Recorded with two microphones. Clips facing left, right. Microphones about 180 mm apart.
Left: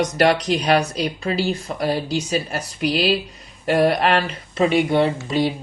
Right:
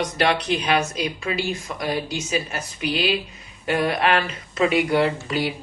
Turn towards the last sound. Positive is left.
turn(degrees=25)  # may be behind; listen again after turning